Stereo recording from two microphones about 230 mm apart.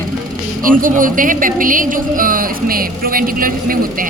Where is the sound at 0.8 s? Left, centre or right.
Right.